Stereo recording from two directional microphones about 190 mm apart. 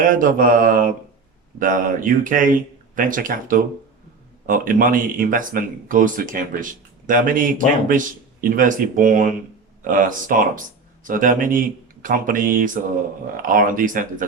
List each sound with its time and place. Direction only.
0.0 s speech: 45° right (ahead or behind)